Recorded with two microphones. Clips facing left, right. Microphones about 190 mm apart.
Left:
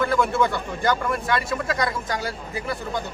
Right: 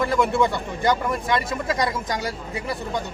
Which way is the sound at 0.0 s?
20° right (ahead or behind).